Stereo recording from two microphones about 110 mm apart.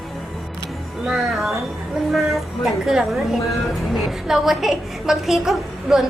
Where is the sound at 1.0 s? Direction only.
Centre (ahead or behind).